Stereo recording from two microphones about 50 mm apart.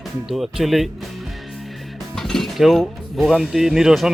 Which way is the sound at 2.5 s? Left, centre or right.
Centre.